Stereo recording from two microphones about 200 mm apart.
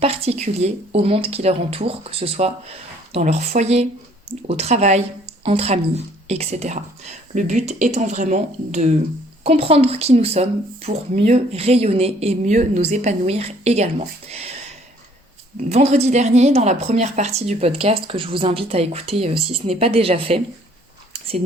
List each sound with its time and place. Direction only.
0.0 s speech: 30° right (ahead or behind)
15.7 s speech: 35° right (ahead or behind)
21.1 s a sound: 30° right (ahead or behind)